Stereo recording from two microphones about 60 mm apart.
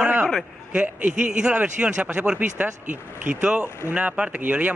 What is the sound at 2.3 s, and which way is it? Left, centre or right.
Speech, right.